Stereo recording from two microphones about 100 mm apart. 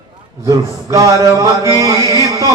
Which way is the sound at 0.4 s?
35° right (ahead or behind).